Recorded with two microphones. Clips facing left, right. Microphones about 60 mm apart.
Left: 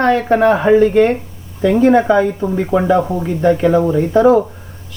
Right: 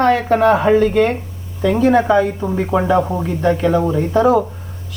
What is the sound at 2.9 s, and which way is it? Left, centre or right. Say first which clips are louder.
Speech: left 1 dB; centre.